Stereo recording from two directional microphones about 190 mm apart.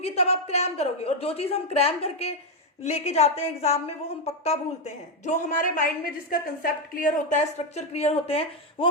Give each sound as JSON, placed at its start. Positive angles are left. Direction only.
{"t": 0.0, "sound": "a woman's voice", "side_deg": 35}